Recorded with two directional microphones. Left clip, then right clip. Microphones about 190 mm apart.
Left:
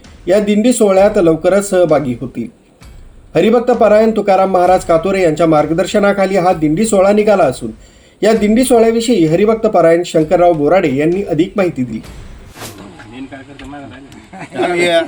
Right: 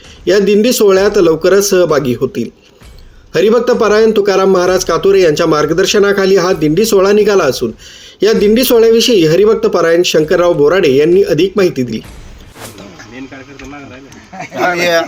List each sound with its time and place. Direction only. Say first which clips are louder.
0.3 s a man's voice: right 3 dB; 60° right (ahead or behind)
14.8 s speech: left 1 dB; centre (ahead or behind)